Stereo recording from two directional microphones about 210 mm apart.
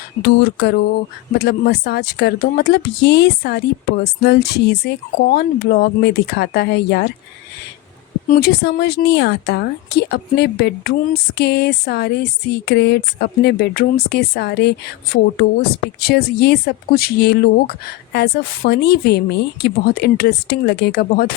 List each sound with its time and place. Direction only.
0.2 s speech: 55° left (ahead or behind)
8.3 s speech: 50° left (ahead or behind)